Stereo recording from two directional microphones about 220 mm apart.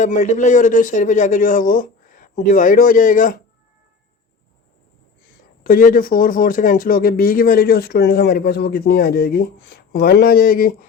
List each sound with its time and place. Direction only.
0.0 s speech: 35° left (ahead or behind)
5.6 s speech: 40° left (ahead or behind)